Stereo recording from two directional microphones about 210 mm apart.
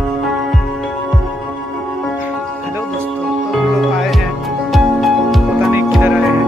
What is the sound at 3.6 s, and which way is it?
Music, centre (ahead or behind).